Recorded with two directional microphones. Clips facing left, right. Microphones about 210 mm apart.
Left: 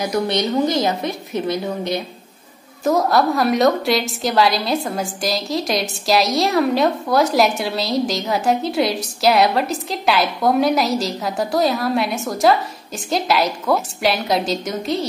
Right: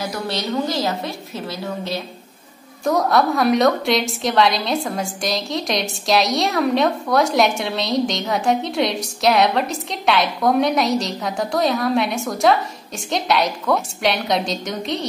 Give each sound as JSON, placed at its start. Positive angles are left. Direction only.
{"t": 0.0, "sound": "a woman's voice", "side_deg": 20}
{"t": 2.8, "sound": "a woman's voice", "side_deg": 0}